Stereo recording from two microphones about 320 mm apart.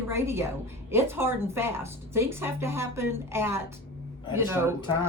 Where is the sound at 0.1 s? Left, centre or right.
Centre.